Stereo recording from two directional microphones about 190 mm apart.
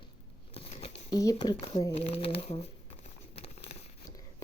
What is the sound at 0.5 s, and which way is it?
Scissors, 30° left (ahead or behind).